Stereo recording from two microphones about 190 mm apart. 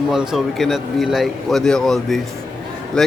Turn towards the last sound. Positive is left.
turn(degrees=5)  # may be behind; listen again after turning